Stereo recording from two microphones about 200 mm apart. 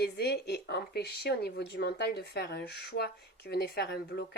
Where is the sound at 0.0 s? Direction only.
55° left (ahead or behind).